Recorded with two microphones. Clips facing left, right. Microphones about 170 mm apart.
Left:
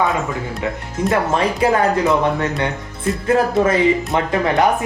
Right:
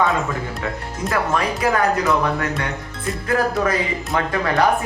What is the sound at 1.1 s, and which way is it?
A man's voice, 30° left (ahead or behind).